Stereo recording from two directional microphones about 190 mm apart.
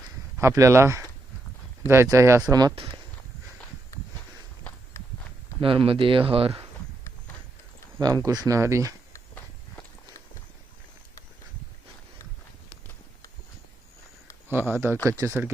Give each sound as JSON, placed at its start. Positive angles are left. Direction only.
{"t": 0.3, "sound": "speech", "side_deg": -15}
{"t": 5.5, "sound": "speech", "side_deg": -30}
{"t": 7.9, "sound": "speech", "side_deg": -20}
{"t": 9.1, "sound": "walk", "side_deg": 10}
{"t": 14.5, "sound": "speech", "side_deg": -10}